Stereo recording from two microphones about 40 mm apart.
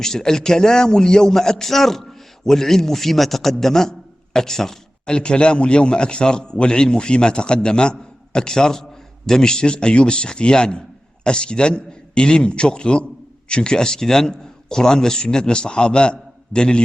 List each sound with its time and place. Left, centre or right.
0.0 s a man's voice: centre
5.0 s a man's voice: left